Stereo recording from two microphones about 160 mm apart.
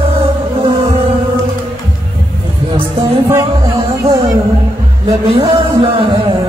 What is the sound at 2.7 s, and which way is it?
Music, 35° right (ahead or behind).